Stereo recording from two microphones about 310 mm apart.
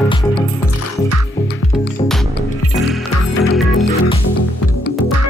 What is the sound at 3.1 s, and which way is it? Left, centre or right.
Music, left.